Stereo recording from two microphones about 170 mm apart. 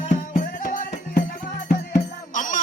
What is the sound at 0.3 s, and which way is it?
Music, 55° left (ahead or behind).